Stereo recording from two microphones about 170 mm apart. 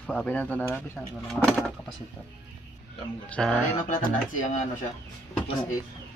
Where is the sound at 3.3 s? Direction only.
5° left (ahead or behind).